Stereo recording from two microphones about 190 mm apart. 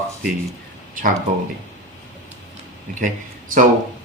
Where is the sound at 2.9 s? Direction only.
40° right (ahead or behind).